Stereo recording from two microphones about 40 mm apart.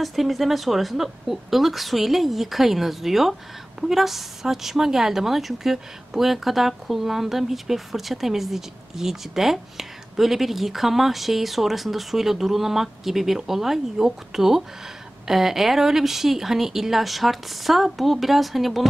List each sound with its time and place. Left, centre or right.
0.0 s a woman's voice: centre